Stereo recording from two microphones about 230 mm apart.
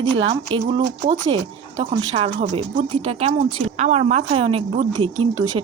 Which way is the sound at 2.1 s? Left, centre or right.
Right.